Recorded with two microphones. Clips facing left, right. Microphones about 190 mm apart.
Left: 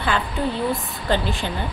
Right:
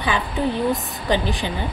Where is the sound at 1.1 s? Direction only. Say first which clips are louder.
Right 1 dB; 15° right (ahead or behind).